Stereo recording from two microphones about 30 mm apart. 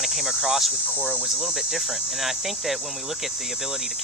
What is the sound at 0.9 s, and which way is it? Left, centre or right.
Speech, right.